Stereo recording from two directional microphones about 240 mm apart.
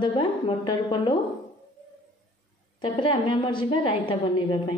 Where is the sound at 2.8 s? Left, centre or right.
Left.